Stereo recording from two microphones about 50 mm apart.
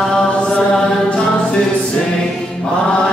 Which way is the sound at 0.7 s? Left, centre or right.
Centre.